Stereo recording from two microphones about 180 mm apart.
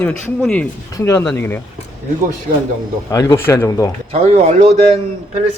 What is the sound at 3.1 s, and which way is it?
Speech, 20° left (ahead or behind).